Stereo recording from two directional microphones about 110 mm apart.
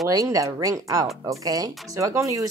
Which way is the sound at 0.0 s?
30° right (ahead or behind).